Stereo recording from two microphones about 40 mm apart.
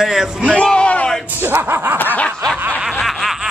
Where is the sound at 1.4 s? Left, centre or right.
Right.